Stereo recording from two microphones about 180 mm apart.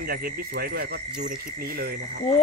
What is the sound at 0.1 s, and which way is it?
Speech, 55° right (ahead or behind).